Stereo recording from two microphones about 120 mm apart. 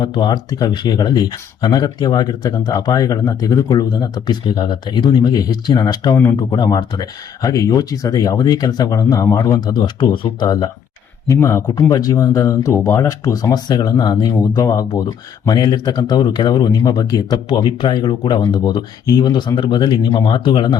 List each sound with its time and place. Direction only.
0.0 s speech: 40° left (ahead or behind)